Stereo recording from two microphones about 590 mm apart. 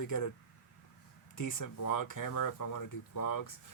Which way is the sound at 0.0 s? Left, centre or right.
Left.